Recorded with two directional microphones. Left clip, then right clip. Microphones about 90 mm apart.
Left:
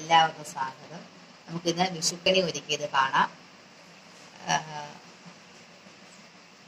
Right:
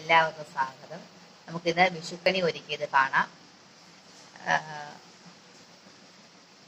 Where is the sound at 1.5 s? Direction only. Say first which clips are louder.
Right 4 dB; 25° left (ahead or behind).